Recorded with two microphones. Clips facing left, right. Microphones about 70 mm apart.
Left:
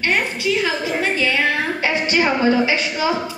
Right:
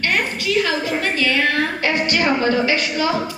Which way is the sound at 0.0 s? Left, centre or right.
Centre.